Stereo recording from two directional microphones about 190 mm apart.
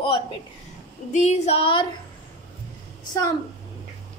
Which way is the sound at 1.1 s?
35° left (ahead or behind).